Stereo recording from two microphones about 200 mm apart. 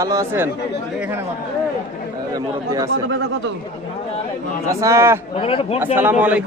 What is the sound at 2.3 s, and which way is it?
Speech, 20° right (ahead or behind).